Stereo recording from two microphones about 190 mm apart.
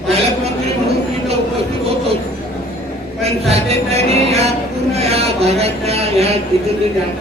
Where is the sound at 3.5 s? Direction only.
35° right (ahead or behind).